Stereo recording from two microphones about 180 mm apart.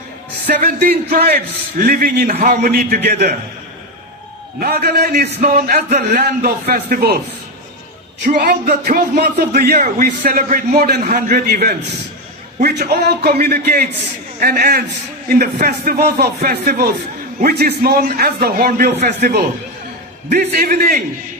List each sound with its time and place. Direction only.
0.4 s speech: 60° right (ahead or behind)
4.6 s speech: 60° right (ahead or behind)
8.2 s speech: 50° right (ahead or behind)